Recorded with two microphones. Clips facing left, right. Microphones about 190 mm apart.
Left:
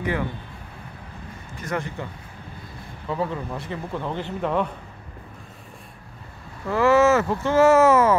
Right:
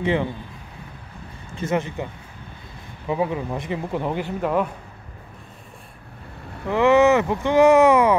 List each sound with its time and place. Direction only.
0.0 s speech: 25° right (ahead or behind)
1.6 s speech: 20° right (ahead or behind)
3.1 s speech: 15° right (ahead or behind)
6.7 s speech: 15° right (ahead or behind)